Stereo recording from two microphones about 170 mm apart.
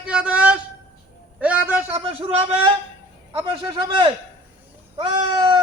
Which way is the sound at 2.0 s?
30° right (ahead or behind).